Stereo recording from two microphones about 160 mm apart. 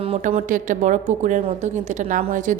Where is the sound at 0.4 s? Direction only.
55° right (ahead or behind).